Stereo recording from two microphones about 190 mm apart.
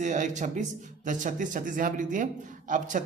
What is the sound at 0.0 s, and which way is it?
Speech, 40° right (ahead or behind).